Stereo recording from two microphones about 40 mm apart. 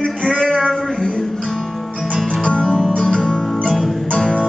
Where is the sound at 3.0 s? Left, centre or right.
Left.